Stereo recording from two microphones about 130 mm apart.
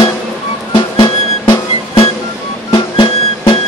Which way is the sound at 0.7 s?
40° left (ahead or behind).